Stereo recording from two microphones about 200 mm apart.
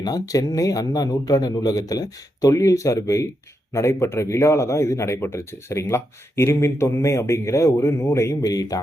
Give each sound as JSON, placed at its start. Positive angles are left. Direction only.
{"t": 0.0, "sound": "speech", "side_deg": 20}